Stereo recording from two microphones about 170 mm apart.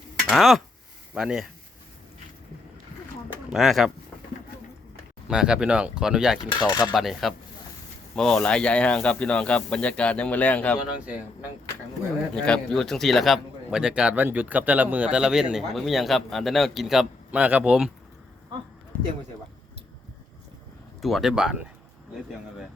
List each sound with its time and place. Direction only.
0.3 s speech: centre (ahead or behind)
3.5 s speech: centre (ahead or behind)
5.3 s speech: 5° right (ahead or behind)
6.4 s speech: 25° left (ahead or behind)
6.9 s speech: centre (ahead or behind)
12.3 s speech: 5° left (ahead or behind)
21.0 s speech: centre (ahead or behind)